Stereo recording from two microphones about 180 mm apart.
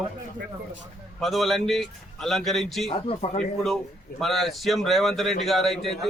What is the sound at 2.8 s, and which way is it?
Speech, 35° left (ahead or behind).